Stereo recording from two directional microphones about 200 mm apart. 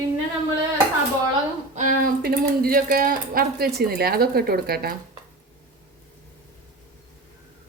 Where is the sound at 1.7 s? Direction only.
45° right (ahead or behind).